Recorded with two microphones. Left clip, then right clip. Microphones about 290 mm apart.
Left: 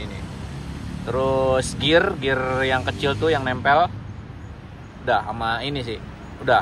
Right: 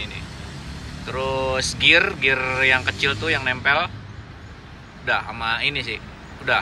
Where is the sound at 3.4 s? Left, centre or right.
Centre.